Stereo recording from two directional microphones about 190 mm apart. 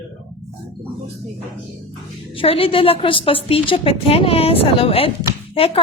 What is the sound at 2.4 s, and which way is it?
A woman's voice, 30° left (ahead or behind).